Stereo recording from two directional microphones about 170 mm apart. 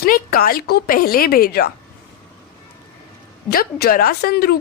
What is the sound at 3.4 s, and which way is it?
Speech, 65° left (ahead or behind).